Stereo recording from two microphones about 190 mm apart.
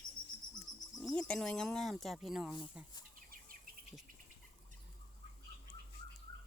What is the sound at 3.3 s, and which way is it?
Insect, 50° right (ahead or behind).